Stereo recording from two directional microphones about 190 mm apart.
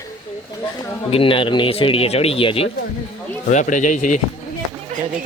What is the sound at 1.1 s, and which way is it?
Speech, 30° left (ahead or behind).